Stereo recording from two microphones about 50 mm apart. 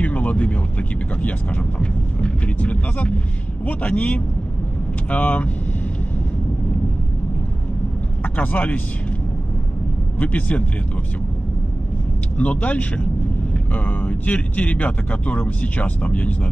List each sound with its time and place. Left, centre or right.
0.0 s speech: left
8.2 s speech: left
10.1 s a man's voice: left
12.4 s speech: left